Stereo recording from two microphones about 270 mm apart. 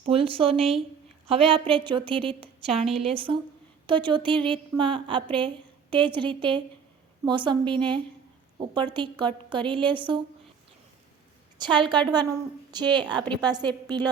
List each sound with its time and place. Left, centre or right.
0.0 s a woman's voice: right
11.5 s a woman's voice: centre